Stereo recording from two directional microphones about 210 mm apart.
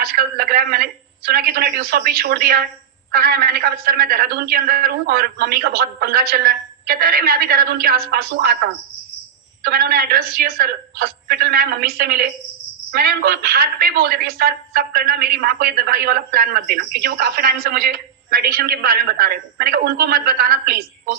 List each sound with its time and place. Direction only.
0.0 s a man's voice: 45° right (ahead or behind)
9.6 s a man's voice: 50° right (ahead or behind)